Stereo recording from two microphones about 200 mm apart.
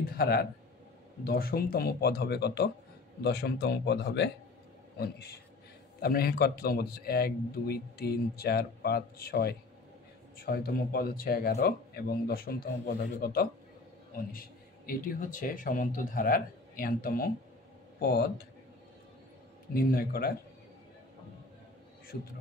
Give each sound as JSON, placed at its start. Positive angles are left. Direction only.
{"t": 0.0, "sound": "a man's voice", "side_deg": 50}
{"t": 19.7, "sound": "speech", "side_deg": 45}